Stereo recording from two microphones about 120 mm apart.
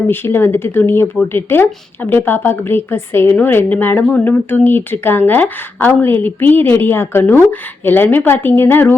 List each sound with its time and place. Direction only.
0.1 s a woman's voice: 20° left (ahead or behind)